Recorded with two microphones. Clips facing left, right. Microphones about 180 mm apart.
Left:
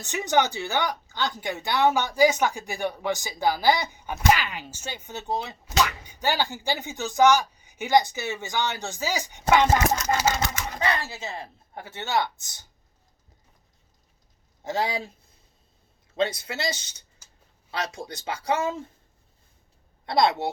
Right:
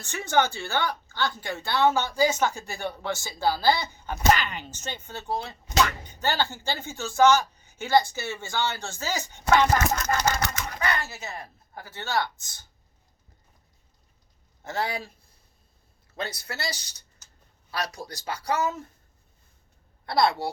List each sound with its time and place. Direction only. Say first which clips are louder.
0.0 s a woman's voice: left 1 dB; 20° left (ahead or behind)
10.7 s speech: left 2 dB; 25° left (ahead or behind)
14.6 s speech: left 3 dB; 20° left (ahead or behind)
16.1 s speech: left 7 dB; 25° left (ahead or behind)
20.1 s speech: left 1 dB; 20° left (ahead or behind)